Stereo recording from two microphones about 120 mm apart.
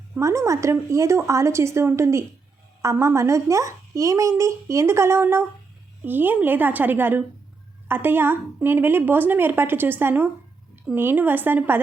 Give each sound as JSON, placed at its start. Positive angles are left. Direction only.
{"t": 0.2, "sound": "a woman's voice", "side_deg": -25}